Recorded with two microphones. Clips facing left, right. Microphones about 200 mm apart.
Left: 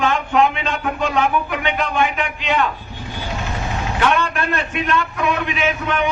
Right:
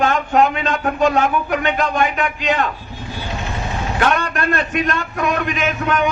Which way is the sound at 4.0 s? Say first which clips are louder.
Even; 40° right (ahead or behind).